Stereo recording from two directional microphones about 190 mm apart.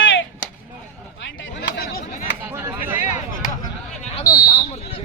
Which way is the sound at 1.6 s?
60° left (ahead or behind).